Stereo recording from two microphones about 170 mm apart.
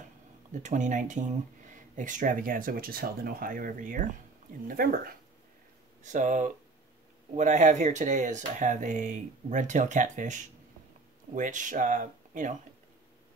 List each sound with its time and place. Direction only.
0.5 s speech: 45° right (ahead or behind)
6.0 s speech: 45° right (ahead or behind)